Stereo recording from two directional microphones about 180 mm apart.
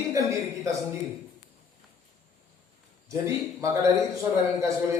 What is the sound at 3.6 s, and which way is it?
Speech, 15° right (ahead or behind).